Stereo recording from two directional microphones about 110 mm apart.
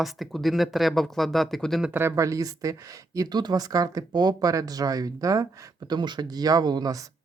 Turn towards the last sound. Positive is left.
turn(degrees=-35)  # may be behind; listen again after turning